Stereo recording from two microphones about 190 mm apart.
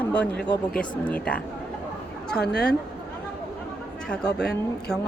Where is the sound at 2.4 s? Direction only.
60° left (ahead or behind).